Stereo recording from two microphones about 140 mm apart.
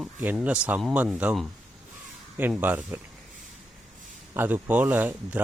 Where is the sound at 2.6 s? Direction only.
15° right (ahead or behind).